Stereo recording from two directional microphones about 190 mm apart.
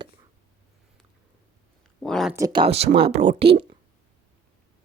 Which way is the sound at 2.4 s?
20° right (ahead or behind).